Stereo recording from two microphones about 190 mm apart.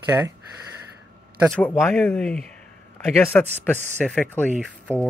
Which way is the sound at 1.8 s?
Centre (ahead or behind).